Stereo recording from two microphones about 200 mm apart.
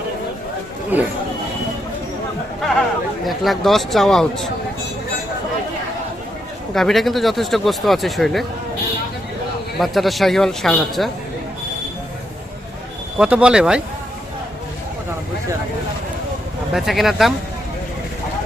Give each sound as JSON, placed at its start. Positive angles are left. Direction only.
{"t": 0.9, "sound": "speech", "side_deg": -10}
{"t": 3.2, "sound": "speech", "side_deg": 0}
{"t": 6.7, "sound": "speech", "side_deg": 0}
{"t": 9.7, "sound": "speech", "side_deg": 0}
{"t": 13.1, "sound": "speech", "side_deg": -5}
{"t": 16.7, "sound": "speech", "side_deg": 0}